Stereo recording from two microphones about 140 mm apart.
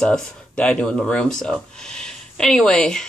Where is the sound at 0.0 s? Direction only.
5° left (ahead or behind).